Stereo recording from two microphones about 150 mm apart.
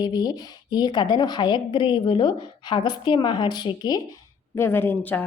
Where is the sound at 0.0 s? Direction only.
30° left (ahead or behind).